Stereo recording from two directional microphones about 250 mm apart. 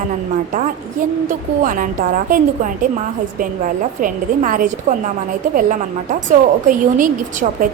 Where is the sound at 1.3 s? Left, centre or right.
Right.